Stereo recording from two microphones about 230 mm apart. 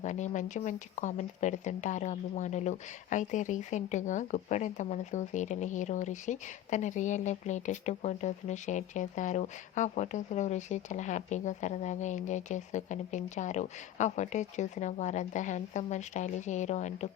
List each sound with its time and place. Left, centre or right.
0.0 s speech: left